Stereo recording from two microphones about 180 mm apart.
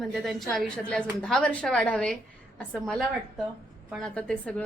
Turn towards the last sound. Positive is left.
turn(degrees=5)  # may be behind; listen again after turning